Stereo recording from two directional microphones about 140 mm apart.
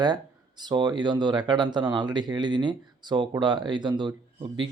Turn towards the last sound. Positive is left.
turn(degrees=-35)  # may be behind; listen again after turning